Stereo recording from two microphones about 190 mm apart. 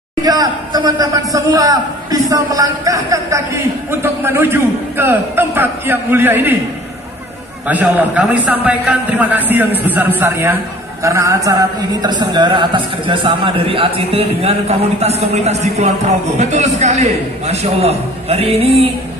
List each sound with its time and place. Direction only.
0.2 s a man's voice: 20° right (ahead or behind)
7.6 s a man's voice: 10° right (ahead or behind); by 18.9 s 30° right (ahead or behind)